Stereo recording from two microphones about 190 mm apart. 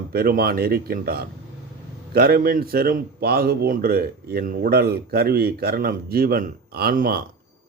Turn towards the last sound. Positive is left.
turn(degrees=-50)  # may be behind; listen again after turning